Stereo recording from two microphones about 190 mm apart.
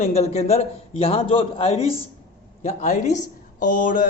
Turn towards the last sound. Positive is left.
turn(degrees=45)  # may be behind; listen again after turning